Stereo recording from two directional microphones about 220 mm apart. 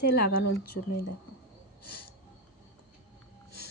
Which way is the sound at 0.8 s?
70° left (ahead or behind).